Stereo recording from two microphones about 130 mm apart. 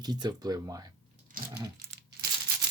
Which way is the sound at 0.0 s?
30° right (ahead or behind).